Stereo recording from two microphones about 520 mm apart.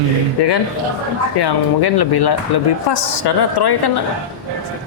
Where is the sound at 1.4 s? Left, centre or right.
Left.